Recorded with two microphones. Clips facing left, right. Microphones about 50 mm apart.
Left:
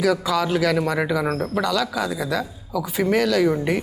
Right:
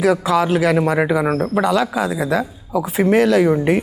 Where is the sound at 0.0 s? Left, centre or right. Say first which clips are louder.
Right 5 dB; right.